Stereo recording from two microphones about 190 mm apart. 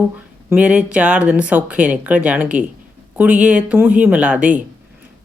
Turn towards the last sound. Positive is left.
turn(degrees=-5)  # may be behind; listen again after turning